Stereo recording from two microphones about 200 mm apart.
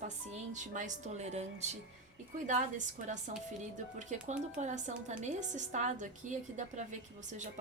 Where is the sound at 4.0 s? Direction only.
35° right (ahead or behind).